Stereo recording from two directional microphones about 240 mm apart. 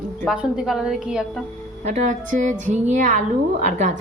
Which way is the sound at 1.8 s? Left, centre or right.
Right.